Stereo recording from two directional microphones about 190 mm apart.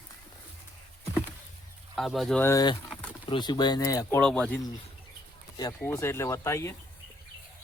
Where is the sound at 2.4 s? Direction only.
20° left (ahead or behind).